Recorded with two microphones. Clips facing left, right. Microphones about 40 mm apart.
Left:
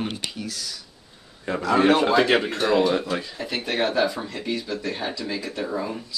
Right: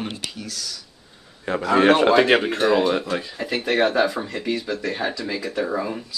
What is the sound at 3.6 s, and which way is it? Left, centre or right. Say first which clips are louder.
Speech: right 3 dB; right.